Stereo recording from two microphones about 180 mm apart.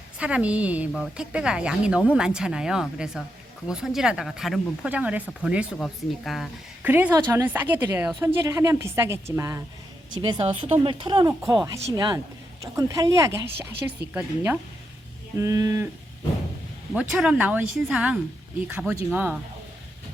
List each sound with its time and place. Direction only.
0.2 s speech: 5° right (ahead or behind)
6.9 s a woman's voice: 15° right (ahead or behind)
10.2 s a woman's voice: 25° right (ahead or behind)
16.9 s a woman's voice: 5° right (ahead or behind)